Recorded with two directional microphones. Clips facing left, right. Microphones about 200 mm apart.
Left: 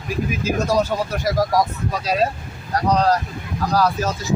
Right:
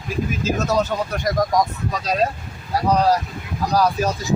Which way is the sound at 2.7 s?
10° right (ahead or behind).